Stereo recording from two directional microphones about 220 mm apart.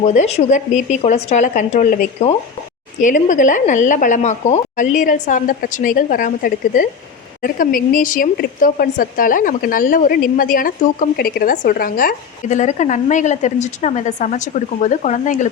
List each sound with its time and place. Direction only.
0.0 s a woman's voice: 30° left (ahead or behind)